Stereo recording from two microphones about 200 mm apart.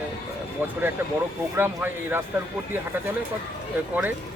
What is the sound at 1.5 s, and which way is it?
Speech, 10° right (ahead or behind).